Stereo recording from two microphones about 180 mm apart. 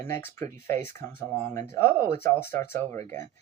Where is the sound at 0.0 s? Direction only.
15° left (ahead or behind).